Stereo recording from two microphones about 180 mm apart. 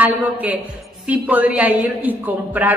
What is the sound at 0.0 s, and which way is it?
A man's voice, 10° right (ahead or behind).